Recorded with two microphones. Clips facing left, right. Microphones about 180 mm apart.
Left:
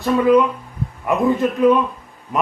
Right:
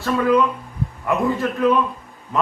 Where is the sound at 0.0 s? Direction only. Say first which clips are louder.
Left 3 dB; 20° left (ahead or behind).